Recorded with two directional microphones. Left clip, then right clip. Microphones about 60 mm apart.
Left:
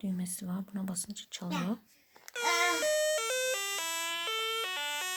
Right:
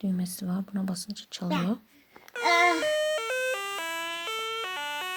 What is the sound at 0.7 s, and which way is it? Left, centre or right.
Speech, right.